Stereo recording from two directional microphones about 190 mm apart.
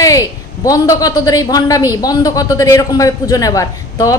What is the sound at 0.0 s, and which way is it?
A woman's voice, 20° left (ahead or behind).